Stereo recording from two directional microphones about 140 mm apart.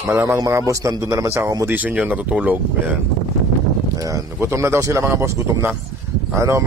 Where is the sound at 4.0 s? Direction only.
20° right (ahead or behind).